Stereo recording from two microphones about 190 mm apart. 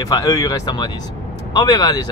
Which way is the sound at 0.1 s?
15° left (ahead or behind).